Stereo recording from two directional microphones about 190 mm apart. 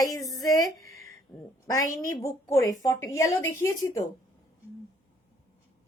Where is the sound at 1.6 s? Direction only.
20° left (ahead or behind).